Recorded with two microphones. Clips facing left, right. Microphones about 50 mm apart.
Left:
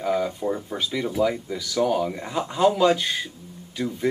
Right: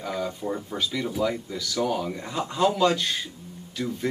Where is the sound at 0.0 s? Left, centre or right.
Centre.